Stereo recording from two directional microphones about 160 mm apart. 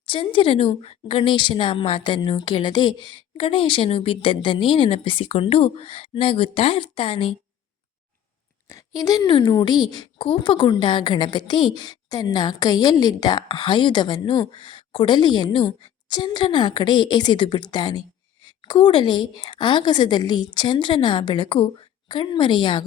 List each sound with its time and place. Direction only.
0.0 s a woman's voice: 30° left (ahead or behind)
8.6 s a woman's voice: 20° left (ahead or behind)